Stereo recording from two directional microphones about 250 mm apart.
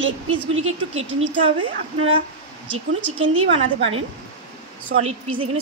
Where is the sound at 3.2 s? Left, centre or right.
Right.